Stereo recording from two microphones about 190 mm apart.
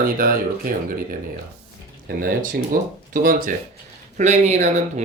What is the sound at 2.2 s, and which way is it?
Speech, 45° right (ahead or behind).